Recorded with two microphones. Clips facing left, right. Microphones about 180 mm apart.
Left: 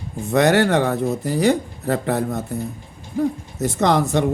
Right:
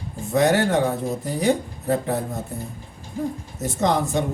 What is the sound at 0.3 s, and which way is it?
Speech, 75° left (ahead or behind).